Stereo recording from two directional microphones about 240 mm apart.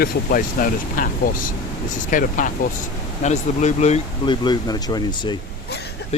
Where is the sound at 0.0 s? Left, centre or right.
Left.